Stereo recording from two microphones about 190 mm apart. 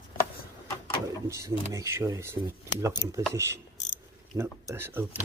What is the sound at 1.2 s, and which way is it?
Speech, 15° right (ahead or behind).